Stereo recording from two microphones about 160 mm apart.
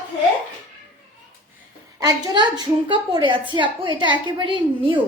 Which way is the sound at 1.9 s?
25° right (ahead or behind).